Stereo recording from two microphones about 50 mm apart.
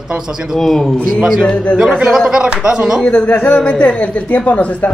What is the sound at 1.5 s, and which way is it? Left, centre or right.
Speech, left.